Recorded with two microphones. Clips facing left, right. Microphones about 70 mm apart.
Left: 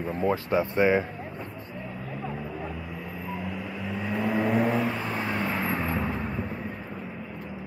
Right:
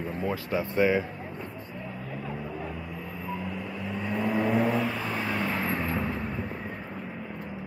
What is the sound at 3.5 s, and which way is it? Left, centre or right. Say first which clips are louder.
Vehicle: left 1 dB; centre.